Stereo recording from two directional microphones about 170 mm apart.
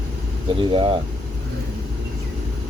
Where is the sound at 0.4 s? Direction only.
30° right (ahead or behind).